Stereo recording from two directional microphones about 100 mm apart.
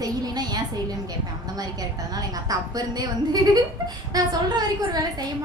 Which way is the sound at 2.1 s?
40° right (ahead or behind).